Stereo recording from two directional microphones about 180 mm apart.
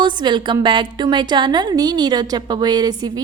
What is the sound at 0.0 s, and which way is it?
A woman's voice, 25° right (ahead or behind).